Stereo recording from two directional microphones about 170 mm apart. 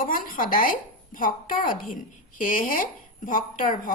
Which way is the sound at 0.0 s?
55° left (ahead or behind).